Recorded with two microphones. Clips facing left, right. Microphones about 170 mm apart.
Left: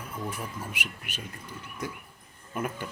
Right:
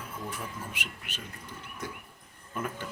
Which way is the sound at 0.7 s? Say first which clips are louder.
Left 2 dB; 10° left (ahead or behind).